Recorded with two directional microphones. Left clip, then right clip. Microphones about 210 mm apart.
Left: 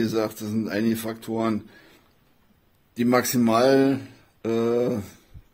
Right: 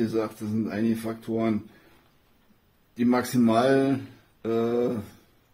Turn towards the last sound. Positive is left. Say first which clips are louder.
# left 2 dB
turn(degrees=40)  # may be behind; listen again after turning